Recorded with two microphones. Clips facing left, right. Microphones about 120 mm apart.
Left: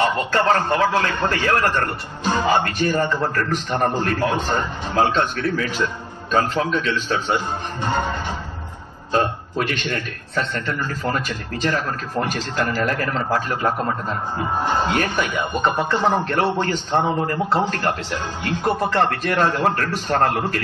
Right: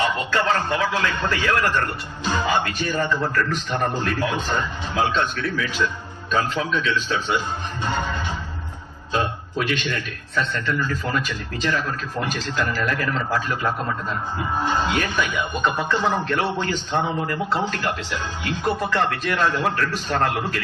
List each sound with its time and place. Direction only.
0.0 s a man's voice: 40° left (ahead or behind)